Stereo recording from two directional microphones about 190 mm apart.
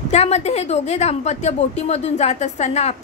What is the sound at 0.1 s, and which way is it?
A woman's voice, 35° left (ahead or behind).